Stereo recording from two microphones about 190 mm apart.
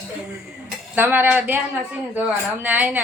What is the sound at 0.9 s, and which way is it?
A woman's voice, 10° right (ahead or behind).